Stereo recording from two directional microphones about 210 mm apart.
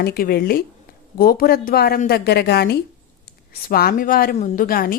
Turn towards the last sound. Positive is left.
turn(degrees=45)  # may be behind; listen again after turning